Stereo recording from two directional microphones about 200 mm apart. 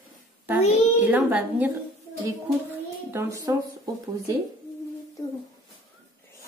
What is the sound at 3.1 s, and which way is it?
Speech, 15° right (ahead or behind).